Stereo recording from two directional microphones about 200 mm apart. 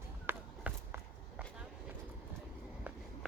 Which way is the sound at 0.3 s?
10° right (ahead or behind).